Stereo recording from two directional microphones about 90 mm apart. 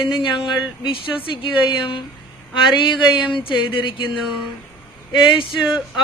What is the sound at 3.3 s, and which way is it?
Speech, 65° left (ahead or behind).